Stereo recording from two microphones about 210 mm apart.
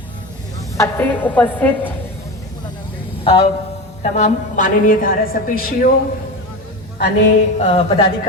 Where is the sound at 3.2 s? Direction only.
25° left (ahead or behind); by 5.9 s 45° left (ahead or behind).